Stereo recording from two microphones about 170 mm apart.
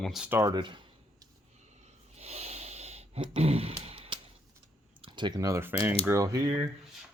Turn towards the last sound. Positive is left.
turn(degrees=-25)  # may be behind; listen again after turning